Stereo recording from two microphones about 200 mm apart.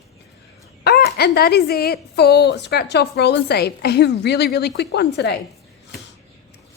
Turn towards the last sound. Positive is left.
turn(degrees=55)  # may be behind; listen again after turning